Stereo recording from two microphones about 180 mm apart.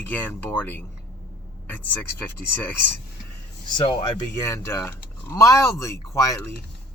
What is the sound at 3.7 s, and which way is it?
Speech, 25° left (ahead or behind).